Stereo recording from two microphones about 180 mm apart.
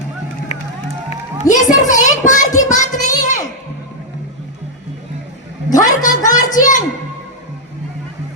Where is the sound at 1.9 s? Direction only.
45° left (ahead or behind).